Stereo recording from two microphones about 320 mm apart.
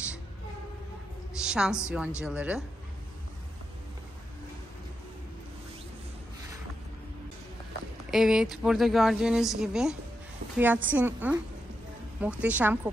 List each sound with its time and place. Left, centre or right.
1.4 s a woman's voice: centre
8.1 s speech: centre